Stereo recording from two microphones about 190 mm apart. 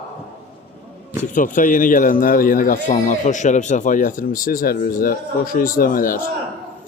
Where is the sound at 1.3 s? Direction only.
45° left (ahead or behind).